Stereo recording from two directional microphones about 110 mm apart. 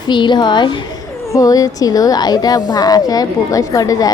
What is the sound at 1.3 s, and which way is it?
A woman's voice, 35° left (ahead or behind).